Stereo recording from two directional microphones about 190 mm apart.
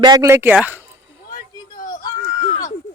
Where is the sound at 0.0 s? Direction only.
20° right (ahead or behind).